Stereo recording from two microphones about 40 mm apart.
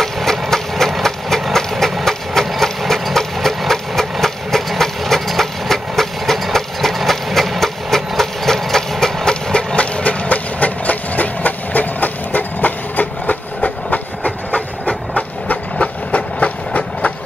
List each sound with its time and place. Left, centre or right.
0.0 s engine: centre
9.3 s engine: left
15.4 s train: left